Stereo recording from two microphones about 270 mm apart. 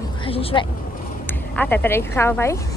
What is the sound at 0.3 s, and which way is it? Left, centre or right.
Speech, left.